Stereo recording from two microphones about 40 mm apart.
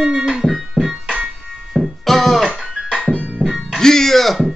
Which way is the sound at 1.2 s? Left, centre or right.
Centre.